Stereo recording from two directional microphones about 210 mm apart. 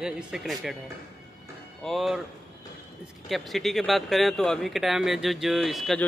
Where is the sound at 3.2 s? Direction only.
Centre (ahead or behind).